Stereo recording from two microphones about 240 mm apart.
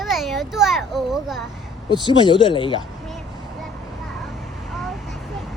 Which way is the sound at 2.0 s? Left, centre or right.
Centre.